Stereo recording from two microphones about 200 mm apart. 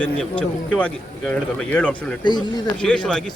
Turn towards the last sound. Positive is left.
turn(degrees=5)  # may be behind; listen again after turning